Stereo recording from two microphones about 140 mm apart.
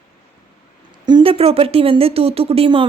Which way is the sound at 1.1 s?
35° right (ahead or behind).